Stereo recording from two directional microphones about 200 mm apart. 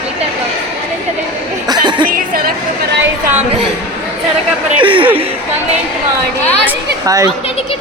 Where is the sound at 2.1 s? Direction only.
45° right (ahead or behind).